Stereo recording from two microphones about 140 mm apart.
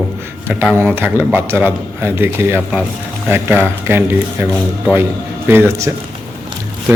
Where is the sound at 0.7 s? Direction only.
15° right (ahead or behind).